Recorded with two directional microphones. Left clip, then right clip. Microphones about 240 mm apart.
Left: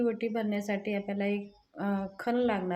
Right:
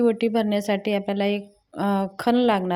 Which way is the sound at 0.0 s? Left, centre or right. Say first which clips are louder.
Right 10 dB; right.